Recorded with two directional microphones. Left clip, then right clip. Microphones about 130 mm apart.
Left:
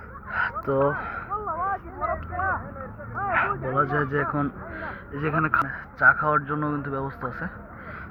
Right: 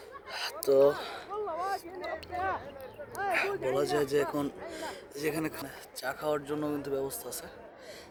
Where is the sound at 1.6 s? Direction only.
30° left (ahead or behind).